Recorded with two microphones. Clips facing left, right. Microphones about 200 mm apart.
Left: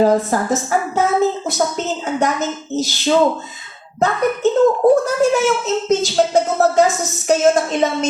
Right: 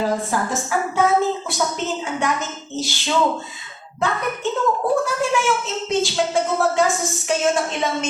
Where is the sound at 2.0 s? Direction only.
40° left (ahead or behind).